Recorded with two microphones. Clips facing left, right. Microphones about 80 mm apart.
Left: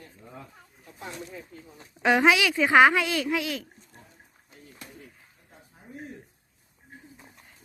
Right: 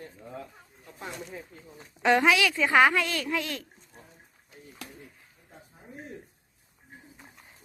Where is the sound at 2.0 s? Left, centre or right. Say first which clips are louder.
Left 1 dB; centre.